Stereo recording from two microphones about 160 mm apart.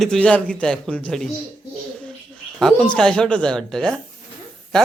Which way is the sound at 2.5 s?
5° left (ahead or behind).